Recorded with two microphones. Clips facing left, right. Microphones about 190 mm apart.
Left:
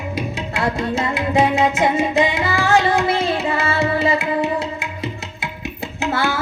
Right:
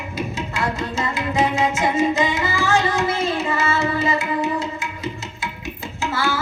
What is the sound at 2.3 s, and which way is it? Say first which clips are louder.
Music: left 3 dB; 60° left (ahead or behind).